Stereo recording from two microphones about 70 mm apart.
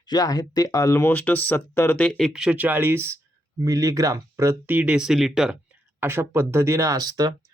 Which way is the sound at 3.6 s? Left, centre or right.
Right.